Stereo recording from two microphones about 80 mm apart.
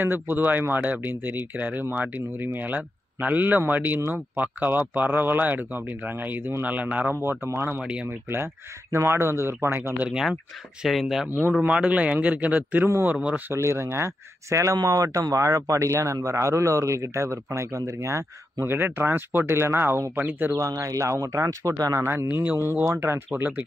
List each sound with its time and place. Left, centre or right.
0.0 s speech: right
7.8 s a man's voice: centre
8.9 s speech: right
9.9 s a man's voice: centre
11.6 s a man's voice: centre
13.5 s speech: right
20.5 s speech: right
22.0 s speech: right